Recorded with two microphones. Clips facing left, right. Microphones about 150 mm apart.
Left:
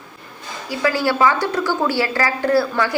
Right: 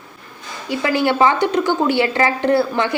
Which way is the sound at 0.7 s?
20° right (ahead or behind).